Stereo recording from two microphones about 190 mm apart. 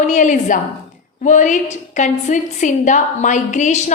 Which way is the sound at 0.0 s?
40° left (ahead or behind).